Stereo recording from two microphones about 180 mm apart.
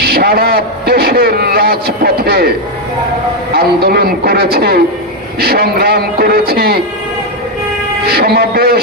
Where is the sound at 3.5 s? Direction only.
60° right (ahead or behind).